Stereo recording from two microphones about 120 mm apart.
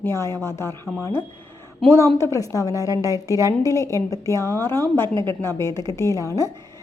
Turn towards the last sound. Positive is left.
turn(degrees=25)  # may be behind; listen again after turning